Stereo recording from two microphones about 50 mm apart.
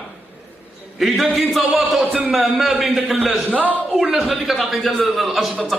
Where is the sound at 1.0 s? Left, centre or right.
Centre.